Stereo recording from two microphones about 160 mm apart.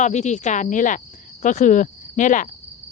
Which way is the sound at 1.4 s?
50° left (ahead or behind).